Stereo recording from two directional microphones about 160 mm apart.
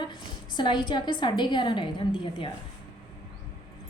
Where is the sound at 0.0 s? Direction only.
30° left (ahead or behind).